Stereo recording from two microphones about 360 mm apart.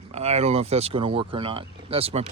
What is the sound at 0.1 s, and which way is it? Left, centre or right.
Speech, centre.